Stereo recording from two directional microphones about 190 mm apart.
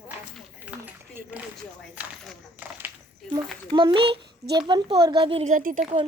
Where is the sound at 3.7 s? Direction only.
25° right (ahead or behind); by 5.8 s 45° right (ahead or behind).